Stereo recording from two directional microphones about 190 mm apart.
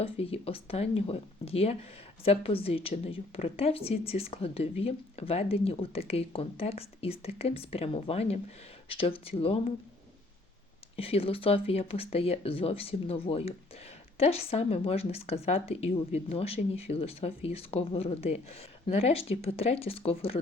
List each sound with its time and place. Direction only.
0.0 s speech: 30° left (ahead or behind)
10.9 s speech: 30° left (ahead or behind)